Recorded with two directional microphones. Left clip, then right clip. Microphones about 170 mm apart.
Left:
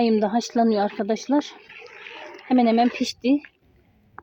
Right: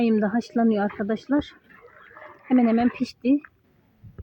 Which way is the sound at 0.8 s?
15° left (ahead or behind).